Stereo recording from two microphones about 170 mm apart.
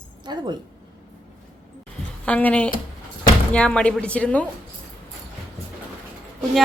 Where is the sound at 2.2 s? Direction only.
10° left (ahead or behind).